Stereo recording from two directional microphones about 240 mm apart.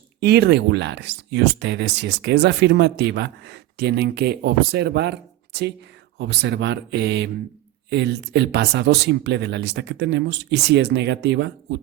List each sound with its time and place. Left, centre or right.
0.2 s speech: right
6.1 s speech: right